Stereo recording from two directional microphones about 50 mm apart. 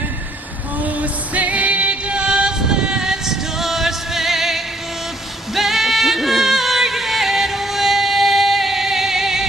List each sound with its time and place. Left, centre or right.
0.8 s music: right; by 9.5 s centre